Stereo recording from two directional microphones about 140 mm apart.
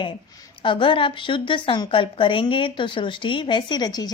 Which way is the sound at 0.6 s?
35° left (ahead or behind).